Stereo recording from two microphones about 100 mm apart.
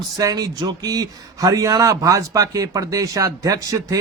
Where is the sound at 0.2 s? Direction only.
35° right (ahead or behind).